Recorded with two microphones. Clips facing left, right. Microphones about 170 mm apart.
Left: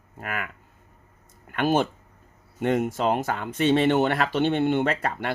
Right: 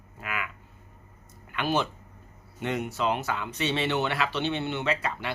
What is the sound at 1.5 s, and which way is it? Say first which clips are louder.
Speech: left 5 dB; 50° left (ahead or behind).